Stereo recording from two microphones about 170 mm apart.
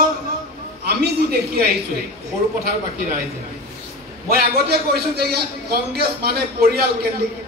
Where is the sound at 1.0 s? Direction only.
70° right (ahead or behind).